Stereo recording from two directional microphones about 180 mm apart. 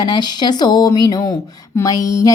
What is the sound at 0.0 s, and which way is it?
Speech, 25° left (ahead or behind).